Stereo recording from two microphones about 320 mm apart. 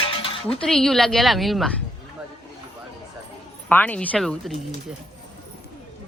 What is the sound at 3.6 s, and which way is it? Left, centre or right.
Speech, centre.